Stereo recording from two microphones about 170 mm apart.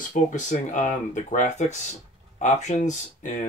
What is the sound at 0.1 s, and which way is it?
Speech, 45° left (ahead or behind).